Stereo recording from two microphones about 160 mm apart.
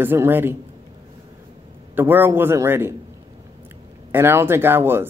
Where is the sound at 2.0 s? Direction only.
15° right (ahead or behind).